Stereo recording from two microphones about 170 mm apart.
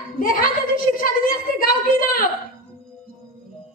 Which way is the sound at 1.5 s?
55° left (ahead or behind).